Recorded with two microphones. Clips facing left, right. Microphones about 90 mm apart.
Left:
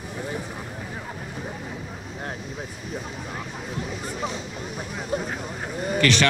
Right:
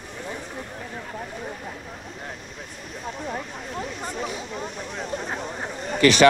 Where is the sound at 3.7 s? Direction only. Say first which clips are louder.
Right 2 dB; 5° left (ahead or behind).